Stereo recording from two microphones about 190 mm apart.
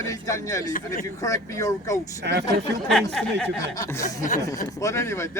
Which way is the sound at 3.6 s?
15° left (ahead or behind).